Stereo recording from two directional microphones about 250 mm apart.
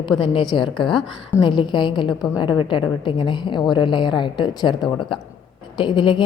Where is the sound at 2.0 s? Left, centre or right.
Centre.